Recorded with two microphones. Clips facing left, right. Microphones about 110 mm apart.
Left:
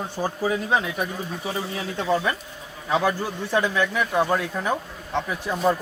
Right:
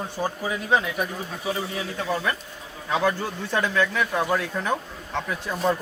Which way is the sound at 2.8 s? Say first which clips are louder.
Left 1 dB; 10° left (ahead or behind).